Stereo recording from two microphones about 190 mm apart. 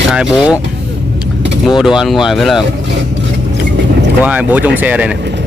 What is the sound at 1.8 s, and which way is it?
Speech, centre (ahead or behind).